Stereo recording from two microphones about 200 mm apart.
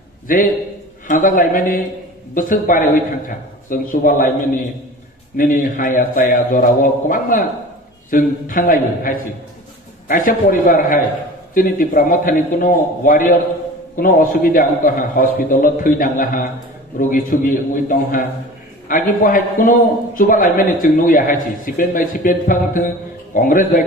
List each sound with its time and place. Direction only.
0.3 s a man's voice: 45° left (ahead or behind)